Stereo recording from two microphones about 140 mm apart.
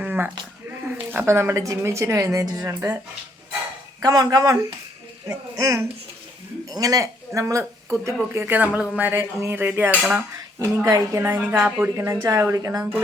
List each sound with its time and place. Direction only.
0.0 s a sound: 15° right (ahead or behind)
1.3 s a woman's voice: 20° right (ahead or behind)
4.0 s a woman's voice: 30° right (ahead or behind); by 10.2 s 10° right (ahead or behind)
10.6 s a woman's voice: 25° right (ahead or behind)